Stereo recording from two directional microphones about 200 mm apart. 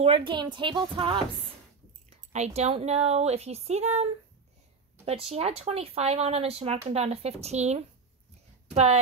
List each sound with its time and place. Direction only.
0.0 s a woman's voice: 25° right (ahead or behind)